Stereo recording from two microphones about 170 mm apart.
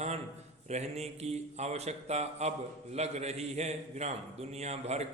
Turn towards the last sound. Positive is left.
turn(degrees=-40)  # may be behind; listen again after turning